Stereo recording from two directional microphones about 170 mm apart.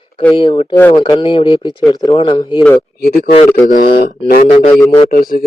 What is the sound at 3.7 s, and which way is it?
A man's voice, 60° left (ahead or behind).